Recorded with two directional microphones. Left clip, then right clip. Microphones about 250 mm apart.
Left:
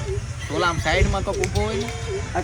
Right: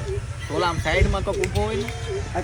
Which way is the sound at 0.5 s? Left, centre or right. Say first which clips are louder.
Left 1 dB; centre.